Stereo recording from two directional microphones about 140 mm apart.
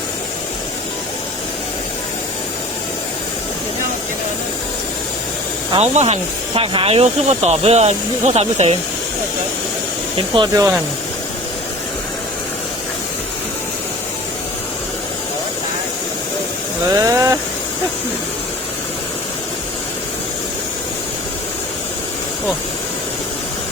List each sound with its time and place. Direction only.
5.7 s speech: 50° right (ahead or behind)
10.2 s speech: 35° right (ahead or behind)
16.9 s speech: 25° right (ahead or behind)